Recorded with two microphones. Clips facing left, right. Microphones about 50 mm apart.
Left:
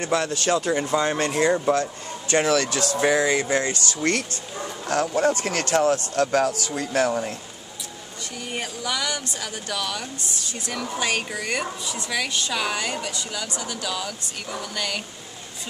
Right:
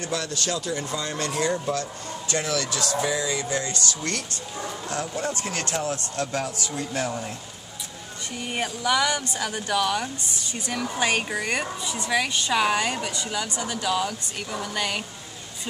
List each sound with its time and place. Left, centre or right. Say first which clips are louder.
0.0 s speech: left 5 dB; left
5.1 s speech: left 7 dB; left
8.4 s a sound: right 2 dB; centre
9.4 s speech: right 5 dB; centre
11.8 s a sound: right 1 dB; right
12.4 s speech: right 4 dB; centre